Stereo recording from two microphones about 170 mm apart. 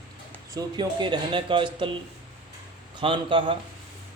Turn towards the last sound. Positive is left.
turn(degrees=-30)  # may be behind; listen again after turning